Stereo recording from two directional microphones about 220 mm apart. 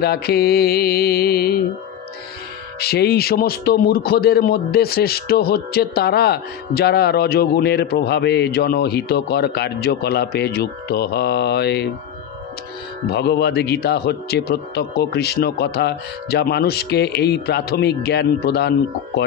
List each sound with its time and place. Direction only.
0.0 s a man's voice: 45° left (ahead or behind)
2.8 s a man's voice: 45° left (ahead or behind)
13.1 s a man's voice: 50° left (ahead or behind)